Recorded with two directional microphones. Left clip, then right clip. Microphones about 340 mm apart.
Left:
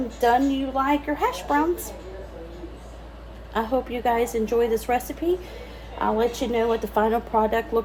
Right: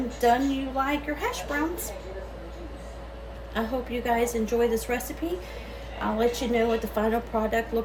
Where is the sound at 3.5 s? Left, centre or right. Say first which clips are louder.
Left 5 dB; left.